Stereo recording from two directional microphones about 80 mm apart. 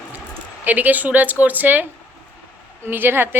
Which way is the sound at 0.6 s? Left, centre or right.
Right.